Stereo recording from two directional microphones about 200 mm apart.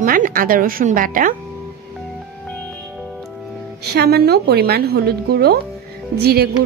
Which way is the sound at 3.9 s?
50° right (ahead or behind).